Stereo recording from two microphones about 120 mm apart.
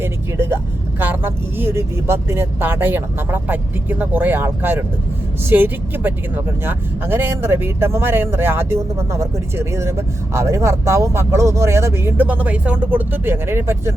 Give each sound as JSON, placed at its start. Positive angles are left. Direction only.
{"t": 0.0, "sound": "speech", "side_deg": -20}